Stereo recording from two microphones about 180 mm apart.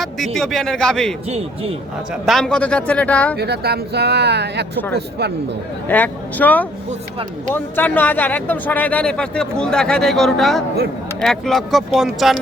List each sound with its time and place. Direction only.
0.3 s a man's voice: 5° left (ahead or behind)
1.3 s speech: 35° right (ahead or behind)
2.2 s speech: centre (ahead or behind)
3.3 s a man's voice: 65° right (ahead or behind)
5.9 s a man's voice: 10° left (ahead or behind)